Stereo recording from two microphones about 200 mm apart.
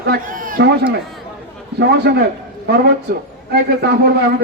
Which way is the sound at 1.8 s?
55° right (ahead or behind).